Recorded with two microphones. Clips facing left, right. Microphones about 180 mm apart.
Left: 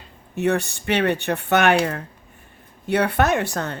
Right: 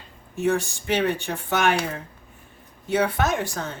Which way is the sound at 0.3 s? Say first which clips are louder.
Left 2 dB; 65° left (ahead or behind).